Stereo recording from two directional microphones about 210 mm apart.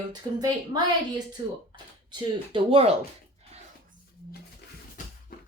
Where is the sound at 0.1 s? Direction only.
20° right (ahead or behind).